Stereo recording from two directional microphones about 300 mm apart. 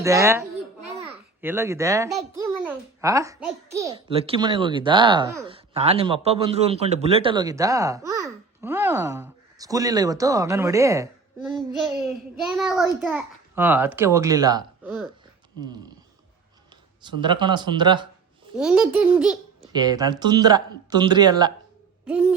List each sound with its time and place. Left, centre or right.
0.0 s a child's voice: centre
0.9 s babbling: centre
2.5 s a child's voice: centre
15.6 s a sound: centre
17.0 s a child's voice: centre
18.5 s a child's voice: centre
22.0 s a sound: centre